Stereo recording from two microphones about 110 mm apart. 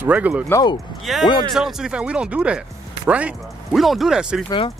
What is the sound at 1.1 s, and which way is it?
Speech, centre (ahead or behind).